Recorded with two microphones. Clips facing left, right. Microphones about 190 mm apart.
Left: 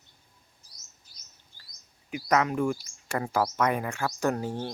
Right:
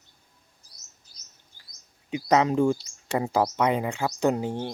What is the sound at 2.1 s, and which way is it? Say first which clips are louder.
Speech: right 4 dB; 20° right (ahead or behind).